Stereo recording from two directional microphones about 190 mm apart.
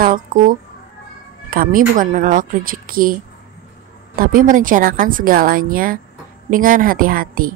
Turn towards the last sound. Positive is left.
turn(degrees=-50)  # may be behind; listen again after turning